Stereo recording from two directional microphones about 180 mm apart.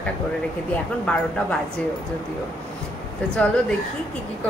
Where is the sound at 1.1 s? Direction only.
5° left (ahead or behind).